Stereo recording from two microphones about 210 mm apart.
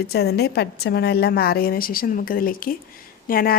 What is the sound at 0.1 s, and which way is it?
A woman's voice, 50° left (ahead or behind).